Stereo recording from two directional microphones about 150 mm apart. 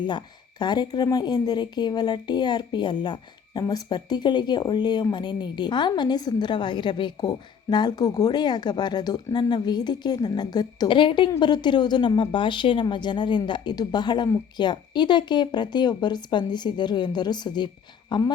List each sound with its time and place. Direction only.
0.0 s speech: 30° left (ahead or behind)